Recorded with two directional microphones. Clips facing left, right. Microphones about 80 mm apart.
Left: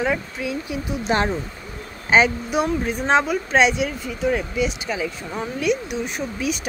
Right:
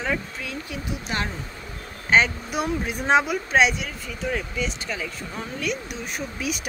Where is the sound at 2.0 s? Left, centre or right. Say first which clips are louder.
Left 3 dB; centre.